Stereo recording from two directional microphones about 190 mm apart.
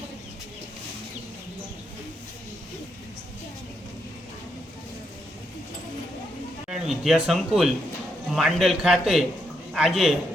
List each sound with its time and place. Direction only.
6.7 s speech: centre (ahead or behind)